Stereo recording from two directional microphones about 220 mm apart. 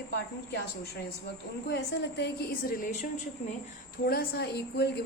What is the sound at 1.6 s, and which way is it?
A woman's voice, 50° left (ahead or behind).